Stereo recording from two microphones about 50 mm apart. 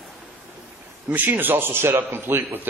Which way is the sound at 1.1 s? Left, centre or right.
Right.